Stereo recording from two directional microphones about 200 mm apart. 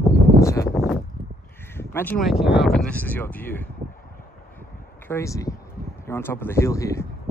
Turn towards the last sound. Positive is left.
turn(degrees=15)  # may be behind; listen again after turning